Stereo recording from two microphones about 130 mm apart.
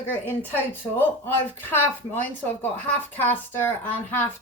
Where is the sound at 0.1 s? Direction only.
15° left (ahead or behind).